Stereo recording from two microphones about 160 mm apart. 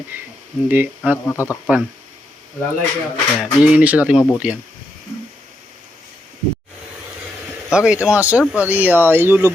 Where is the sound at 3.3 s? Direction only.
5° right (ahead or behind).